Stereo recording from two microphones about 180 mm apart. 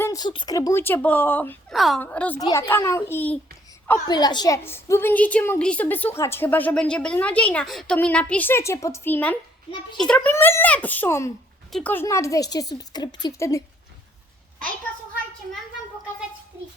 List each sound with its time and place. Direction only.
0.0 s a woman's voice: 20° left (ahead or behind)
1.7 s a woman's voice: centre (ahead or behind)
4.1 s a woman's voice: 25° left (ahead or behind)